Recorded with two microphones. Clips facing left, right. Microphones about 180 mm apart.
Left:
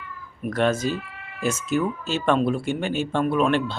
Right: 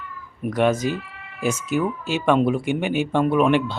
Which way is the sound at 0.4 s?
15° right (ahead or behind).